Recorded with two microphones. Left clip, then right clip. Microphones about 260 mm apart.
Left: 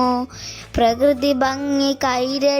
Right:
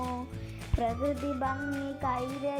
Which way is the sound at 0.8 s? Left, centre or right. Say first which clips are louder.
Left 15 dB; left.